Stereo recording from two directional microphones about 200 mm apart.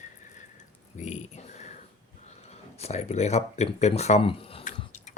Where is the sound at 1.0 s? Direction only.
35° left (ahead or behind).